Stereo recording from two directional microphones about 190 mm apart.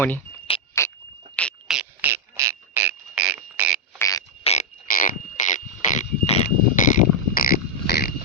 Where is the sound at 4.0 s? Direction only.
20° left (ahead or behind).